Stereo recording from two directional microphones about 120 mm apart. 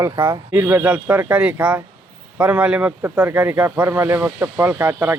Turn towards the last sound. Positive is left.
turn(degrees=-15)  # may be behind; listen again after turning